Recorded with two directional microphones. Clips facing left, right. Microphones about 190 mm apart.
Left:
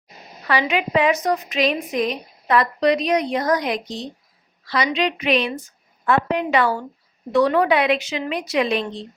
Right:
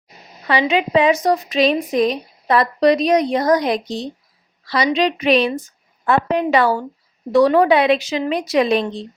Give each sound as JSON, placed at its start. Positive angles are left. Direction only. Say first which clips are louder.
{"t": 0.4, "sound": "a woman's voice", "louder": "right 3 dB", "side_deg": -25}